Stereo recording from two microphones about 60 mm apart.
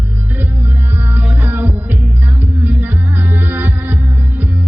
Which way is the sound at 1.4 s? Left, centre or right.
Right.